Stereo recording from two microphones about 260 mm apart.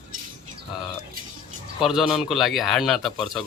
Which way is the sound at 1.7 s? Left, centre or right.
Centre.